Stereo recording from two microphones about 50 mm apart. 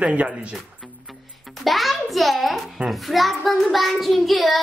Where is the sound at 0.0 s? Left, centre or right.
Right.